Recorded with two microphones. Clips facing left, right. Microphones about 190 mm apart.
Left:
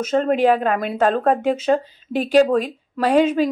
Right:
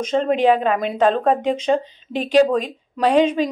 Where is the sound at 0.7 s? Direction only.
5° left (ahead or behind).